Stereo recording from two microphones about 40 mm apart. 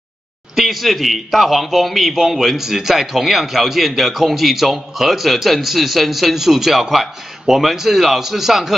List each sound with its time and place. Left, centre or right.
0.6 s a man's voice: centre